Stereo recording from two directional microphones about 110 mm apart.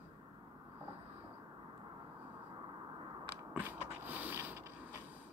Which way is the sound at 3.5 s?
15° right (ahead or behind).